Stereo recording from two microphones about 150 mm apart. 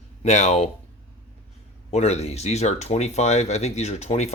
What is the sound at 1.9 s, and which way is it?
Speech, 45° left (ahead or behind).